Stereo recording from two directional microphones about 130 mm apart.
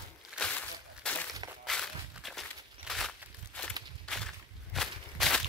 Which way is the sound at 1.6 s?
Centre (ahead or behind).